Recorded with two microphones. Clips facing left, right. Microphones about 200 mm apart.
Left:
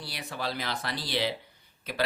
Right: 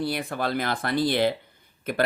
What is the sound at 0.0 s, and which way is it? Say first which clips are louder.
Speech: right 9 dB; 55° right (ahead or behind).